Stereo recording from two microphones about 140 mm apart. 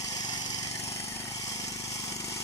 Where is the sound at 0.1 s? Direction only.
30° left (ahead or behind).